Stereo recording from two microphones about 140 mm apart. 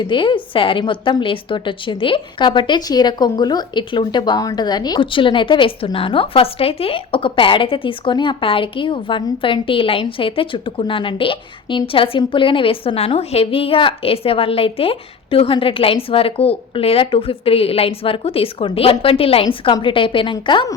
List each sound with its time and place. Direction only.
0.0 s a woman's voice: 35° left (ahead or behind)